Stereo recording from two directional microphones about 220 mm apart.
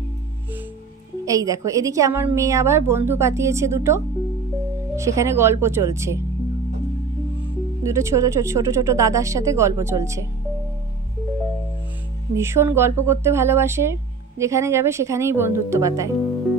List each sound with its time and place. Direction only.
1.2 s a woman's voice: 15° right (ahead or behind)
7.8 s a woman's voice: 15° right (ahead or behind)
12.4 s a woman's voice: 10° right (ahead or behind)